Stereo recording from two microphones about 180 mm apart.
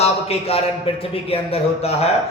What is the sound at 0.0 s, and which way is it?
Speech, 35° left (ahead or behind).